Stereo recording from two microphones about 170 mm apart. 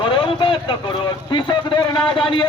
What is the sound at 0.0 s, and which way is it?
Speech, 30° left (ahead or behind).